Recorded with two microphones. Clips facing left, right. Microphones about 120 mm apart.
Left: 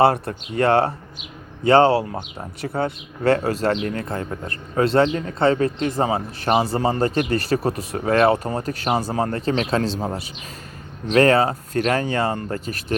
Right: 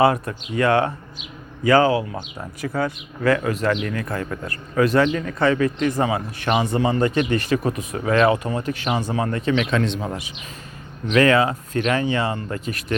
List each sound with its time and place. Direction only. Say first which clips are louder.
0.0 s speech: left 1 dB; 35° left (ahead or behind)